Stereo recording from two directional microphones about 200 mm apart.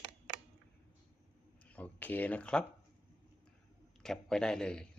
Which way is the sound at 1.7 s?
5° left (ahead or behind).